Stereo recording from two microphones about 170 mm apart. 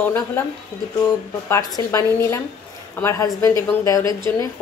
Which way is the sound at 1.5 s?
15° left (ahead or behind).